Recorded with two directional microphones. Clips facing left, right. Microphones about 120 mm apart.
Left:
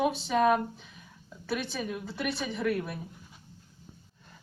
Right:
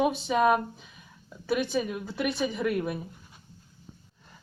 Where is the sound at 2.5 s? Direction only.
15° right (ahead or behind).